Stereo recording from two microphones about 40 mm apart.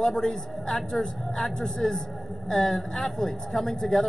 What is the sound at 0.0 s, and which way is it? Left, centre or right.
Speech, centre.